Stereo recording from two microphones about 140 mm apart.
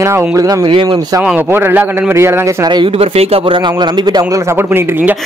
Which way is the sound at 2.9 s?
45° right (ahead or behind).